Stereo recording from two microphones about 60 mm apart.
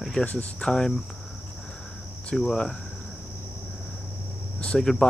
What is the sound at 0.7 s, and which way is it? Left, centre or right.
Speech, centre.